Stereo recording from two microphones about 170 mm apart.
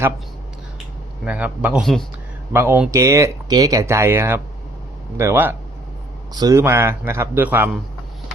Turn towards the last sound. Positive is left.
turn(degrees=-10)  # may be behind; listen again after turning